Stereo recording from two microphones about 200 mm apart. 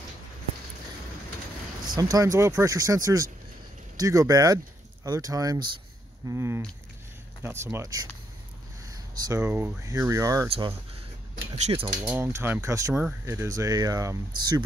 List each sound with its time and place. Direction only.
2.0 s speech: 20° right (ahead or behind)
11.5 s speech: 30° right (ahead or behind)
12.0 s speech: 10° right (ahead or behind)